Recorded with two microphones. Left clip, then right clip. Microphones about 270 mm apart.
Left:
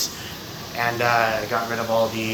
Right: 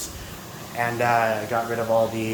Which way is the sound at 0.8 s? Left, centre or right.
Centre.